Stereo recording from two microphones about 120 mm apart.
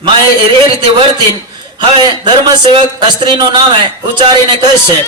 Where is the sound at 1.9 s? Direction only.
40° right (ahead or behind).